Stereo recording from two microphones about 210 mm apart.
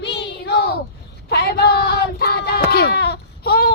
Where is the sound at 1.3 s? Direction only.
50° left (ahead or behind).